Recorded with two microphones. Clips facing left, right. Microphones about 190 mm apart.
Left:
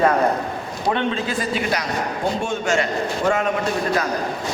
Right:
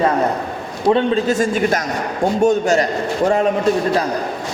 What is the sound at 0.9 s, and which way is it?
A man's voice, 40° right (ahead or behind).